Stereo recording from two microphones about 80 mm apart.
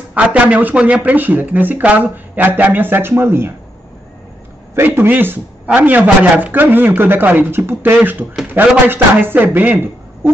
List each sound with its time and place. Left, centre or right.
0.1 s speech: centre
4.7 s speech: right